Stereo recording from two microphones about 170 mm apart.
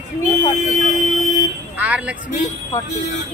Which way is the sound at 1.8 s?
10° right (ahead or behind).